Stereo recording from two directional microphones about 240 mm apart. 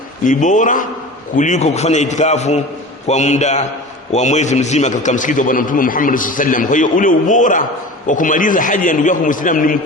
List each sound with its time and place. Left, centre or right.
0.3 s a man's voice: left